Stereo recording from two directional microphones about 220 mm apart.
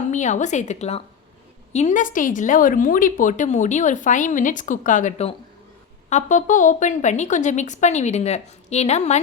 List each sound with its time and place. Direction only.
0.1 s a woman's voice: 35° left (ahead or behind)